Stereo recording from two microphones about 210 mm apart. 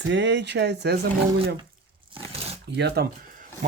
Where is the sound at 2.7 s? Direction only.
55° right (ahead or behind).